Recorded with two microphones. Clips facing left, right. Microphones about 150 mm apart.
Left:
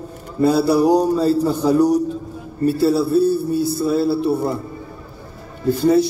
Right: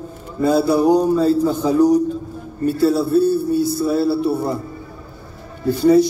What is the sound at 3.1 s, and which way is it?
Speech, 30° left (ahead or behind).